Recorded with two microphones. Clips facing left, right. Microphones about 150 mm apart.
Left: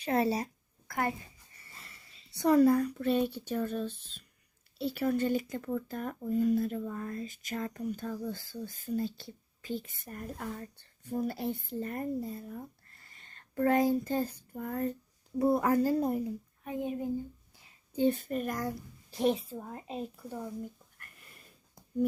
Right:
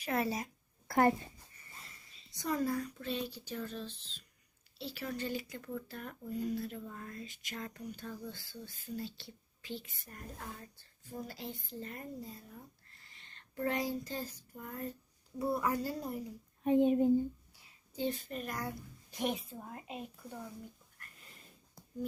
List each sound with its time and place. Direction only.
0.0 s speech: 30° left (ahead or behind)
0.9 s a child's voice: 35° right (ahead or behind)
2.3 s speech: 70° left (ahead or behind); by 10.2 s 50° left (ahead or behind)
10.8 s speech: 65° left (ahead or behind)
14.6 s speech: 90° left
15.4 s speech: 45° left (ahead or behind)
16.6 s a child's voice: 25° right (ahead or behind)
17.9 s speech: 55° left (ahead or behind)
19.1 s a woman's voice: 30° left (ahead or behind)